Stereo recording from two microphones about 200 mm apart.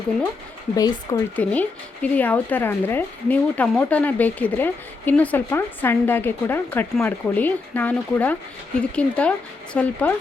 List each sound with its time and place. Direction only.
0.8 s speech: 20° left (ahead or behind)
1.4 s a woman's voice: 5° left (ahead or behind)